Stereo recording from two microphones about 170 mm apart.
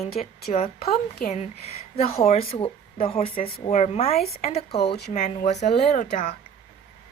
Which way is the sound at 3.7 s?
40° left (ahead or behind).